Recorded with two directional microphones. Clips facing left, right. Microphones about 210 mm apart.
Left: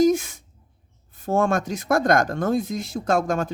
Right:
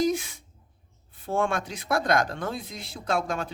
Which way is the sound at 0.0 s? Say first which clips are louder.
Left 7 dB; 45° left (ahead or behind).